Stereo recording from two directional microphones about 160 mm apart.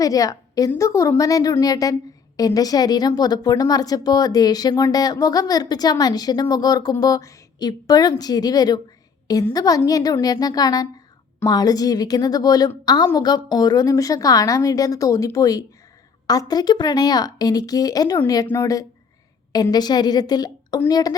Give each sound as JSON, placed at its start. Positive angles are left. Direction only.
{"t": 0.0, "sound": "a woman's voice", "side_deg": 20}